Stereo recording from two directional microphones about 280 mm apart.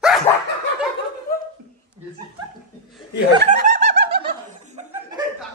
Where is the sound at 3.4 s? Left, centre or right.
Right.